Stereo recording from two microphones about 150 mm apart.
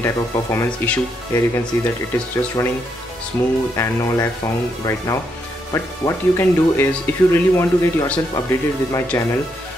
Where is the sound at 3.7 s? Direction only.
20° left (ahead or behind).